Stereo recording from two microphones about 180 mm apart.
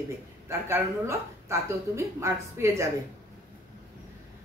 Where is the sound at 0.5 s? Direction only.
15° right (ahead or behind).